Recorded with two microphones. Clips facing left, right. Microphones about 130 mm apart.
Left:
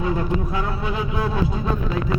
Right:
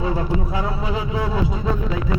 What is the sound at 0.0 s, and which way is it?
Speech, 30° right (ahead or behind).